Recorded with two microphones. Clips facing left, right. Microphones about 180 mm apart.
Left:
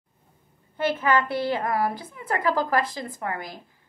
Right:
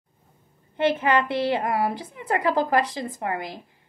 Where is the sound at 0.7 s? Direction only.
20° right (ahead or behind).